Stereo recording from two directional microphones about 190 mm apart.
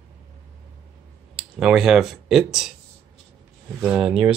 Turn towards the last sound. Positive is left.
turn(degrees=-5)  # may be behind; listen again after turning